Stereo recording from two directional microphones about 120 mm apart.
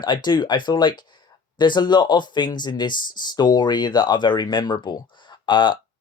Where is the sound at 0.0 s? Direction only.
40° left (ahead or behind).